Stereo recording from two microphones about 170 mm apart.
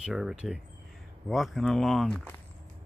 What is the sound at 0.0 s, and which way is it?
Speech, 5° right (ahead or behind).